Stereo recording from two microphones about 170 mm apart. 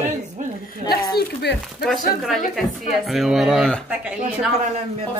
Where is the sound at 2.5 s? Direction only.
Centre (ahead or behind).